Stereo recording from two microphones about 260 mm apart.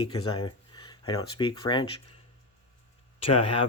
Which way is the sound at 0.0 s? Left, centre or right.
Centre.